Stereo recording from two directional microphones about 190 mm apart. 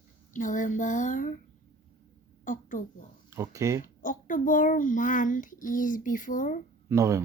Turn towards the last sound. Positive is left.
turn(degrees=-15)  # may be behind; listen again after turning